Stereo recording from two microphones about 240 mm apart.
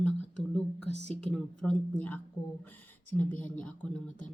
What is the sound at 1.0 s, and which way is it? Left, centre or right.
Speech, centre.